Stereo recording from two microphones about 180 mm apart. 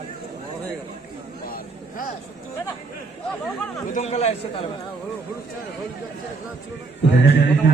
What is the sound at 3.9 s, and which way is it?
Speech, 40° left (ahead or behind).